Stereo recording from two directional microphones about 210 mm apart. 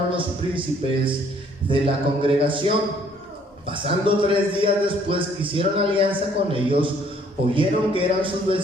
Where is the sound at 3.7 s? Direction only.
25° right (ahead or behind).